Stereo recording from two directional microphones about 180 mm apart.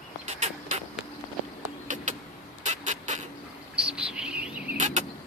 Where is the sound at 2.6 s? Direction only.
40° right (ahead or behind).